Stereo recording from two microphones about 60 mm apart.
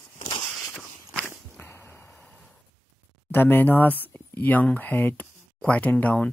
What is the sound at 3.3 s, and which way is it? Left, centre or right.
Speech, left.